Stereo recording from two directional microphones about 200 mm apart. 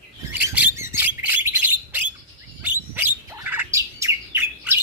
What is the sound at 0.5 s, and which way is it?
Bird, 10° right (ahead or behind).